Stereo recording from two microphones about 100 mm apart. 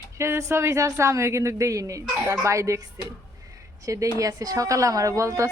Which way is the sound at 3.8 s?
30° right (ahead or behind).